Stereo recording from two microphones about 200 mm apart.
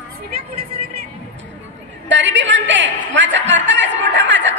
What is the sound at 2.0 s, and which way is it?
A woman's voice, 65° right (ahead or behind).